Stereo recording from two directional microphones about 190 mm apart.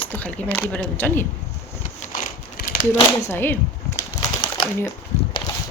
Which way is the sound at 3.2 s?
10° left (ahead or behind).